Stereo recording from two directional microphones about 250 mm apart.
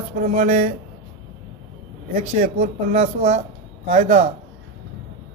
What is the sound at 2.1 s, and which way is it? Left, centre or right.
Speech, right.